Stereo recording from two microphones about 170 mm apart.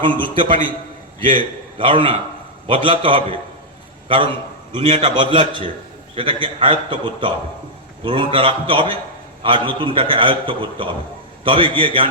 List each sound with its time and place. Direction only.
0.2 s a man's voice: 30° right (ahead or behind)